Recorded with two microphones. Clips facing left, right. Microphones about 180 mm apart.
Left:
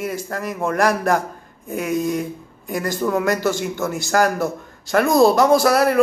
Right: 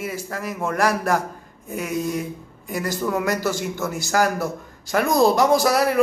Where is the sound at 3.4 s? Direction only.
10° right (ahead or behind).